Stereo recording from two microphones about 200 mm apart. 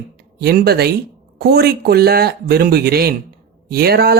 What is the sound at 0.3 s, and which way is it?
Speech, 50° right (ahead or behind).